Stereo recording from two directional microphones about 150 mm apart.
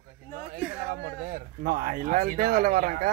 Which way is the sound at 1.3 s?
70° right (ahead or behind).